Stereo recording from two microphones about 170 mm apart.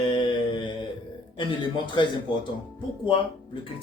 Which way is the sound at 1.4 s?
30° left (ahead or behind).